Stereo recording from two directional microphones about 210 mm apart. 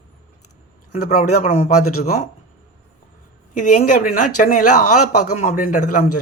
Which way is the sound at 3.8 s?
40° left (ahead or behind).